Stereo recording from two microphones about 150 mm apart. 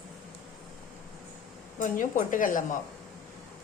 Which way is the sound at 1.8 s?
65° left (ahead or behind).